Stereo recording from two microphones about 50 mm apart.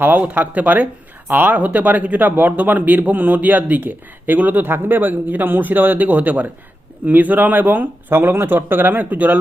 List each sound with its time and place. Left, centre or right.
0.0 s speech: right
8.1 s speech: right